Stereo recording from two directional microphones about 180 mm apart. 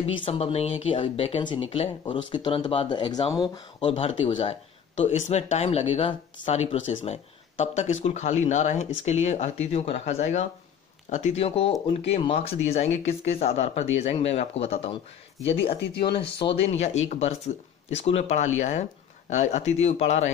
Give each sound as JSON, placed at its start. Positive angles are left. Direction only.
{"t": 0.0, "sound": "speech", "side_deg": 35}
{"t": 15.8, "sound": "speech", "side_deg": 65}
{"t": 16.6, "sound": "speech", "side_deg": 40}